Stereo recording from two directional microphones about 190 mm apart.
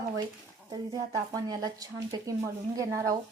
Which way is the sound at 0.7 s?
20° right (ahead or behind).